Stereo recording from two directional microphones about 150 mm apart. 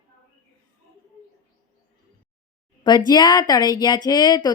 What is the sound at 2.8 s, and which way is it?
Speech, 30° left (ahead or behind).